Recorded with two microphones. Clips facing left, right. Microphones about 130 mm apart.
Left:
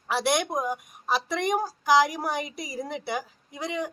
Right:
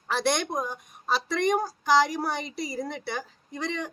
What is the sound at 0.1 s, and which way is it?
A woman's voice, 10° left (ahead or behind).